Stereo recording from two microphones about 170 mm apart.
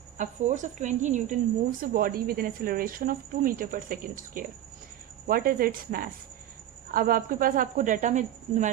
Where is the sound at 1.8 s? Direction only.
55° right (ahead or behind).